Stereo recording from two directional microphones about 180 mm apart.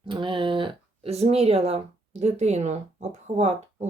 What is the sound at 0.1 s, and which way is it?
Speech, 25° right (ahead or behind).